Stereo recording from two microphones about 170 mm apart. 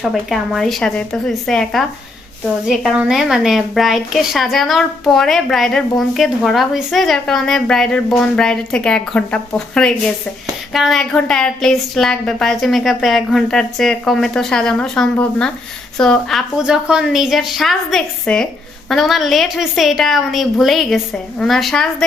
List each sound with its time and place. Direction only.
0.0 s a woman's voice: centre (ahead or behind)